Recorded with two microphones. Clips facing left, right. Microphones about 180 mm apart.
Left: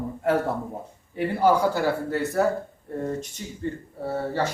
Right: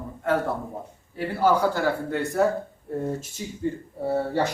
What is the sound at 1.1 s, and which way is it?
Speech, 10° left (ahead or behind).